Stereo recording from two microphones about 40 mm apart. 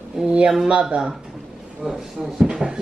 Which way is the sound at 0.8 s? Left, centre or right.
Centre.